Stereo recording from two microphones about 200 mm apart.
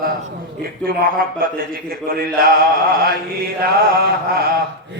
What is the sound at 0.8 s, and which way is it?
Speech, 45° right (ahead or behind).